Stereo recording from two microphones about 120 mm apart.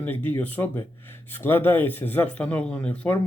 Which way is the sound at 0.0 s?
15° left (ahead or behind).